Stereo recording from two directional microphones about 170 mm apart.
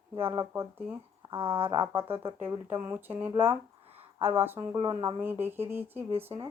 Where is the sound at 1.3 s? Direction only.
30° right (ahead or behind).